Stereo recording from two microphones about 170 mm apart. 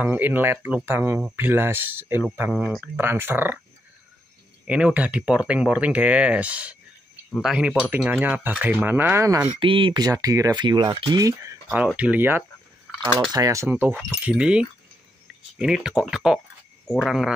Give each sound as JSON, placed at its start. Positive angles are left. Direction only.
{"t": 0.0, "sound": "speech", "side_deg": -10}
{"t": 4.6, "sound": "speech", "side_deg": -5}
{"t": 9.5, "sound": "speech", "side_deg": -30}